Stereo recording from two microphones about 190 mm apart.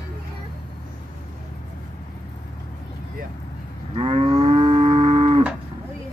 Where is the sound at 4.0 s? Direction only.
30° right (ahead or behind).